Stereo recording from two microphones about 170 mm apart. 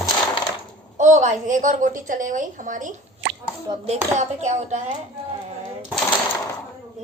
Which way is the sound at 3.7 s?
20° right (ahead or behind).